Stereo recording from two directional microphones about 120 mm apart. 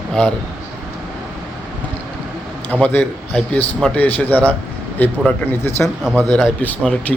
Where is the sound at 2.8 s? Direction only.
15° left (ahead or behind).